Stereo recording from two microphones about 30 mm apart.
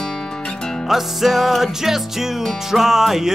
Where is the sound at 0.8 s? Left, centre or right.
Centre.